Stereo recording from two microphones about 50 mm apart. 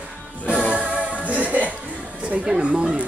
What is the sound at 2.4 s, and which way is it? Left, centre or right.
Music, centre.